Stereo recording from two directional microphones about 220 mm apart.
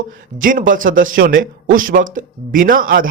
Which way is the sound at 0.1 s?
40° right (ahead or behind).